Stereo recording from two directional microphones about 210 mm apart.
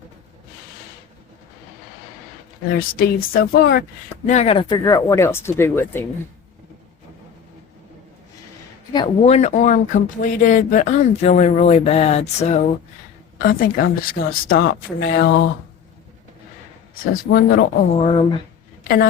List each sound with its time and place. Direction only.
2.7 s speech: 45° left (ahead or behind)
4.3 s speech: 30° left (ahead or behind); by 6.1 s 10° left (ahead or behind)
8.9 s speech: 25° left (ahead or behind)
13.5 s speech: 45° left (ahead or behind)
16.9 s speech: 45° left (ahead or behind)
17.8 s speech: 25° left (ahead or behind)